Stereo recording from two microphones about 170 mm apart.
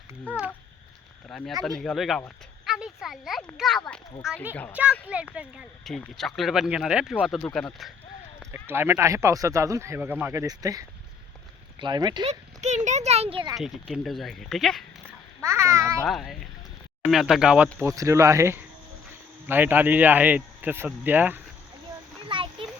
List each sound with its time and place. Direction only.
0.1 s a sound: 10° right (ahead or behind)
1.3 s speech: centre (ahead or behind)
8.6 s speech: 15° right (ahead or behind)
12.3 s speech: 45° right (ahead or behind)
13.6 s speech: centre (ahead or behind)
15.4 s a child's voice: 15° right (ahead or behind)
16.0 s speech: centre (ahead or behind)
17.7 s speech: 15° right (ahead or behind)
22.3 s a sound: 30° right (ahead or behind)